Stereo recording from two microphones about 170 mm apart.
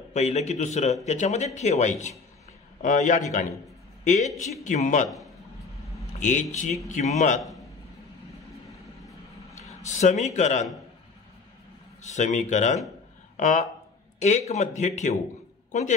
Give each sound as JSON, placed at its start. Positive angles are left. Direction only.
{"t": 0.1, "sound": "a man's voice", "side_deg": 40}
{"t": 6.1, "sound": "a man's voice", "side_deg": 45}
{"t": 9.8, "sound": "a man's voice", "side_deg": 45}
{"t": 12.0, "sound": "a man's voice", "side_deg": 45}